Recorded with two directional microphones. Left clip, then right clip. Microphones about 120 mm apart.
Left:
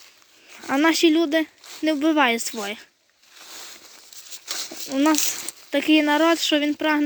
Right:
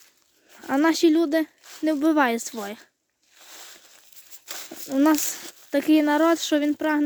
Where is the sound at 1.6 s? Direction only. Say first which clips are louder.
Left 2 dB; centre (ahead or behind).